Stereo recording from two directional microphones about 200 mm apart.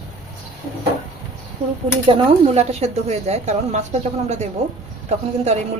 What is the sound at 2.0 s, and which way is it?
A woman's voice, 25° right (ahead or behind).